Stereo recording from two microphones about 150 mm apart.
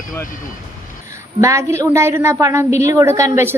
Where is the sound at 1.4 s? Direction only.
20° right (ahead or behind).